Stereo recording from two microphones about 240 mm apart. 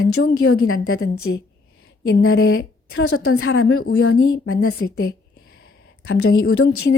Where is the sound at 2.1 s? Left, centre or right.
Left.